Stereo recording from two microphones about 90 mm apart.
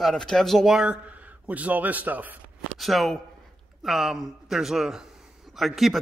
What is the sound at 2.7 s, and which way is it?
Speech, centre (ahead or behind).